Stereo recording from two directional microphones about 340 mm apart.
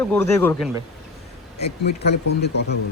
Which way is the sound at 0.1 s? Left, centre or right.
Centre.